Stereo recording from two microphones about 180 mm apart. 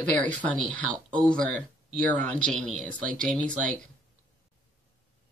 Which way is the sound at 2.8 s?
45° right (ahead or behind).